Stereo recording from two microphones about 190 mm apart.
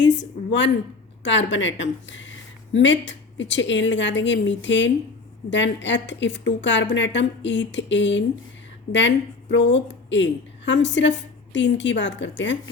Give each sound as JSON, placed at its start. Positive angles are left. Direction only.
{"t": 0.0, "sound": "a woman's voice", "side_deg": 70}